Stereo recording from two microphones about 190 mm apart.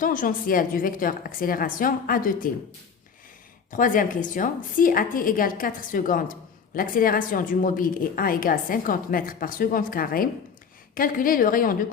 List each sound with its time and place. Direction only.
0.0 s a woman's voice: 45° left (ahead or behind)
3.7 s a woman's voice: 45° left (ahead or behind)